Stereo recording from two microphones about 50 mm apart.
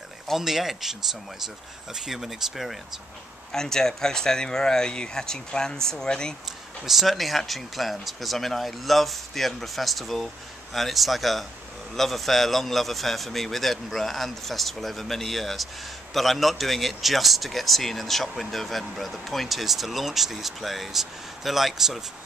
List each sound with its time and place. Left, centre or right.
0.4 s speech: centre
2.0 s a man's voice: centre
3.5 s speech: centre
6.8 s a man's voice: centre